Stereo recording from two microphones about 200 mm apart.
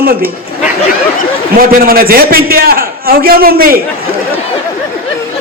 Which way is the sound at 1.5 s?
50° right (ahead or behind).